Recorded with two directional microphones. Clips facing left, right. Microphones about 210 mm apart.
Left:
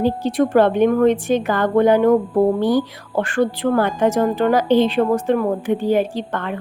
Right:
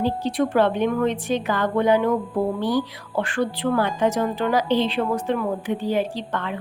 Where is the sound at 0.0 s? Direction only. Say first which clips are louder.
Left 4 dB; 45° left (ahead or behind).